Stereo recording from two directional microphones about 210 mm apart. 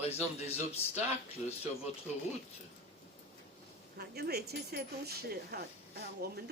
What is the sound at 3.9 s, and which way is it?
Speech, 50° right (ahead or behind).